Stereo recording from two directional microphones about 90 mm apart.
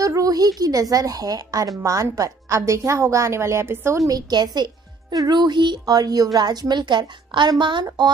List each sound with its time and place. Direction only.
0.0 s a sound: 40° right (ahead or behind)
0.6 s a woman's voice: 45° right (ahead or behind)
4.1 s a woman's voice: 50° right (ahead or behind)